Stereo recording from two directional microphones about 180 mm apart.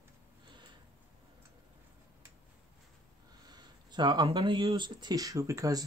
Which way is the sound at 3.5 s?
25° right (ahead or behind).